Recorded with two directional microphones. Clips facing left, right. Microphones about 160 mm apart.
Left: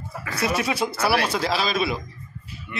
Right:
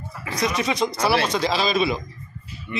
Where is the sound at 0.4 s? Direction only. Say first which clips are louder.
Right 1 dB; 5° left (ahead or behind).